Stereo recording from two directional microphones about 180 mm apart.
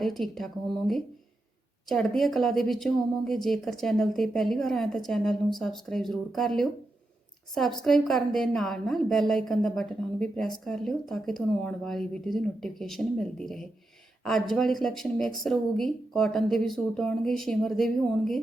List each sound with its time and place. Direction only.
0.0 s a woman's voice: centre (ahead or behind)